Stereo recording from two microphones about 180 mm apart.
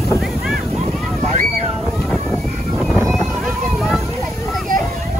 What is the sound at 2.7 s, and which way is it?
Boat, centre (ahead or behind).